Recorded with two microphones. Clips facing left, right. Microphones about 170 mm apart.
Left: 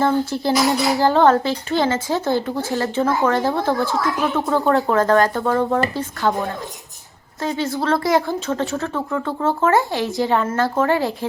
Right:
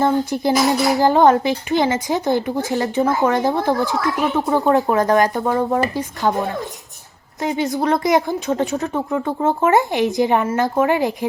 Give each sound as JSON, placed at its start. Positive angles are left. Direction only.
{"t": 0.0, "sound": "speech", "side_deg": -15}
{"t": 7.4, "sound": "speech", "side_deg": -15}